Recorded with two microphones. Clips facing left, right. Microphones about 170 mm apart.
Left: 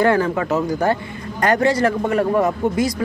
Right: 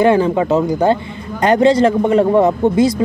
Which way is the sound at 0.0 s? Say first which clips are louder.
Right 5 dB; 20° right (ahead or behind).